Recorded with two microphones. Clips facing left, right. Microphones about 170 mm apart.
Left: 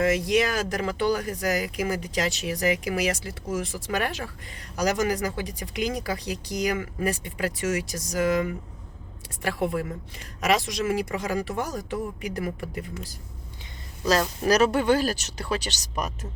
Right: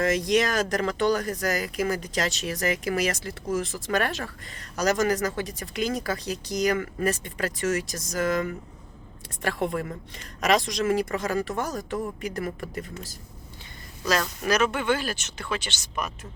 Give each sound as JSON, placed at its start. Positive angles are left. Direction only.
{"t": 0.0, "sound": "speech", "side_deg": 10}
{"t": 14.1, "sound": "speech", "side_deg": 35}